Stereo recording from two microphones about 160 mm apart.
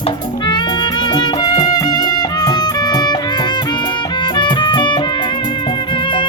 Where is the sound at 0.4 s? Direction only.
30° left (ahead or behind).